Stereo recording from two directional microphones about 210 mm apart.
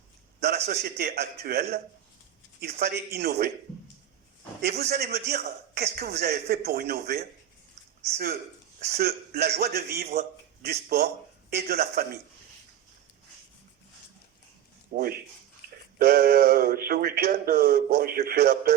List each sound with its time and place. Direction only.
0.7 s a man's voice: 50° right (ahead or behind)
2.8 s a man's voice: 50° right (ahead or behind)
4.6 s a man's voice: 50° right (ahead or behind)
8.8 s a man's voice: 50° right (ahead or behind)
14.9 s a man's voice: 45° right (ahead or behind)